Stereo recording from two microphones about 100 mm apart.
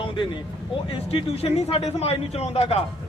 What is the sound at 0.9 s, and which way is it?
Speech, 75° left (ahead or behind).